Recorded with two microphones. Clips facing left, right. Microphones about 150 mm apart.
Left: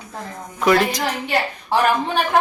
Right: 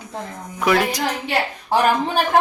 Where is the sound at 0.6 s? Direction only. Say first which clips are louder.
Left 2 dB; 5° right (ahead or behind).